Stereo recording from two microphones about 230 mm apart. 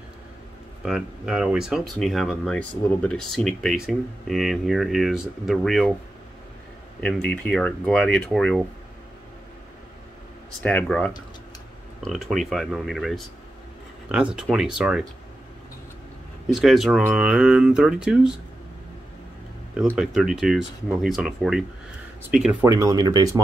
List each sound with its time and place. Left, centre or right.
0.8 s speech: centre
7.0 s speech: centre
10.6 s speech: centre
16.5 s speech: centre
20.0 s speech: centre
22.7 s speech: centre